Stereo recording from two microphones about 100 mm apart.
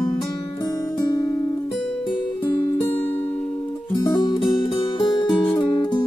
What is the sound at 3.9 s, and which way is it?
Music, 50° left (ahead or behind).